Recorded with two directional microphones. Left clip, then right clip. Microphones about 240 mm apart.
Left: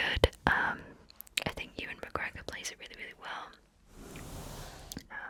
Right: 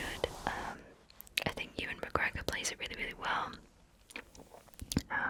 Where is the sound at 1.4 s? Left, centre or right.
Centre; by 3.6 s right.